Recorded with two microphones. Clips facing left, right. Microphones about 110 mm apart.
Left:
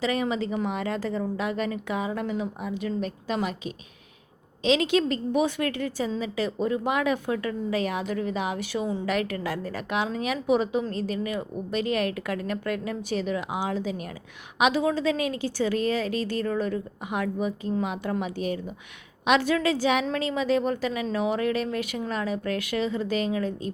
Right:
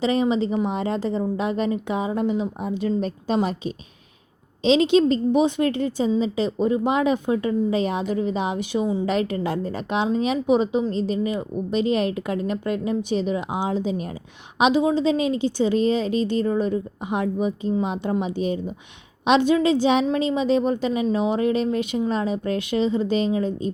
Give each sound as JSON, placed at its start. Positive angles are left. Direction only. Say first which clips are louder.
{"t": 0.0, "sound": "speech", "louder": "right 6 dB", "side_deg": -25}